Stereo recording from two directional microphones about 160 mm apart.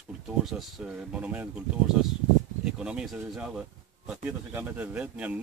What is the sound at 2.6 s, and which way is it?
Speech, 5° right (ahead or behind).